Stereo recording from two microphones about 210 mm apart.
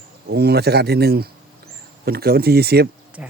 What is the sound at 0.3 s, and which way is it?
Speech, 50° right (ahead or behind).